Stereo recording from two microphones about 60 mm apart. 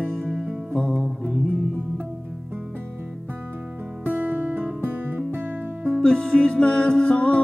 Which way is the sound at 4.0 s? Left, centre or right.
Right.